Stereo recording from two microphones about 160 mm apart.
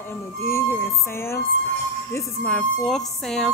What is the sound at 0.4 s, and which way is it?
Speech, 15° left (ahead or behind).